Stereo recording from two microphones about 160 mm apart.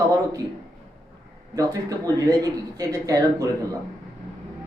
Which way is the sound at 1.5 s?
20° right (ahead or behind).